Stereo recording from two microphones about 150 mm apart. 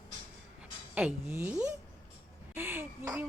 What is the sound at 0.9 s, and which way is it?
A woman's voice, 10° right (ahead or behind).